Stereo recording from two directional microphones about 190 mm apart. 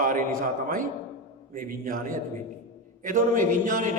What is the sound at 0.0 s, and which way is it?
A man's voice, 45° right (ahead or behind).